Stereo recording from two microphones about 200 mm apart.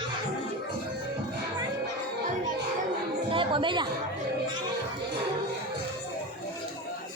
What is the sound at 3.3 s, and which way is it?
Speech, 25° right (ahead or behind).